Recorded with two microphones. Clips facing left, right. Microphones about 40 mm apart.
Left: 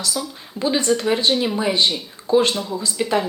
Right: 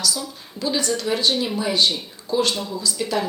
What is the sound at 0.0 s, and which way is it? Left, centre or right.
Speech, left.